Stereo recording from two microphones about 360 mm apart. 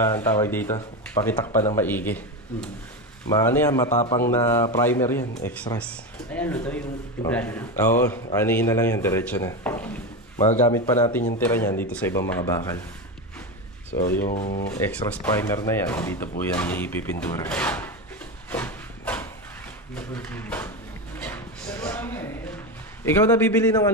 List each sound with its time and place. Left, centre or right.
0.0 s speech: centre
3.3 s speech: centre
3.9 s speech: centre
4.2 s speech: centre
14.2 s speech: left
14.8 s speech: centre
18.5 s a sound: centre
23.0 s speech: centre